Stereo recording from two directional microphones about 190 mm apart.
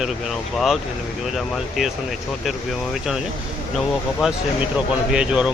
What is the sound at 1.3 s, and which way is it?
Speech, centre (ahead or behind).